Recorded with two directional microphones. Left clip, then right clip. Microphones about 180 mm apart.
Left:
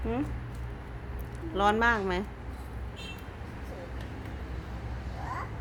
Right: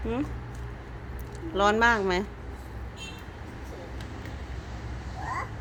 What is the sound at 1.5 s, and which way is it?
Speech, 10° right (ahead or behind).